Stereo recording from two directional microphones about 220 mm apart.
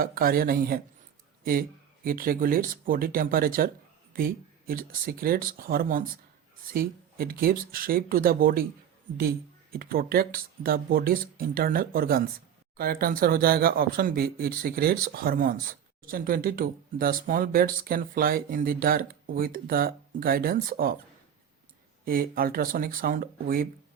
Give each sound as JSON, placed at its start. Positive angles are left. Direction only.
{"t": 0.0, "sound": "speech", "side_deg": -40}
{"t": 2.0, "sound": "speech", "side_deg": -40}
{"t": 9.7, "sound": "speech", "side_deg": -40}
{"t": 22.0, "sound": "speech", "side_deg": -40}